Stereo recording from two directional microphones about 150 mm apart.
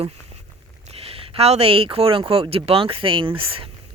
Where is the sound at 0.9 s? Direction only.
40° right (ahead or behind).